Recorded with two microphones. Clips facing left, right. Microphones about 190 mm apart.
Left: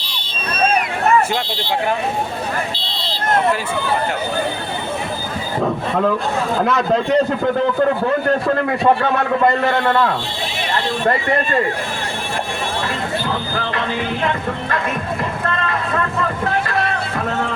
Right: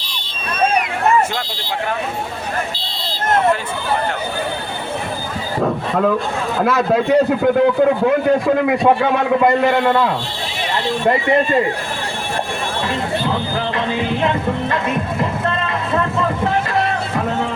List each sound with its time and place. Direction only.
6.6 s a man's voice: 5° right (ahead or behind)
15.2 s vehicle: 20° right (ahead or behind)